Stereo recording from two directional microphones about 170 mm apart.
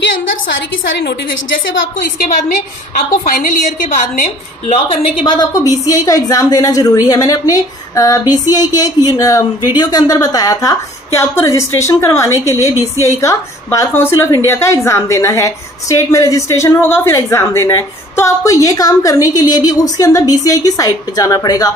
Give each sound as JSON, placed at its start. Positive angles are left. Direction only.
{"t": 2.1, "sound": "a woman's voice", "side_deg": 60}
{"t": 5.2, "sound": "a woman's voice", "side_deg": 25}